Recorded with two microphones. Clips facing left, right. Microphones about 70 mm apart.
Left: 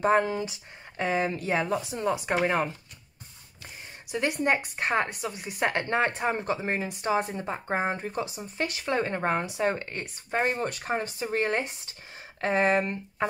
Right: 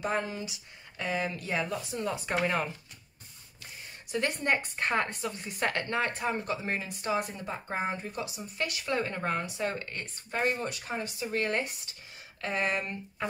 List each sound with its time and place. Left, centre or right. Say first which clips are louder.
0.0 s speech: left 8 dB; left
4.1 s speech: left 3 dB; centre; by 10.6 s left
10.6 s speech: left 5 dB; left
11.1 s speech: left 3 dB; left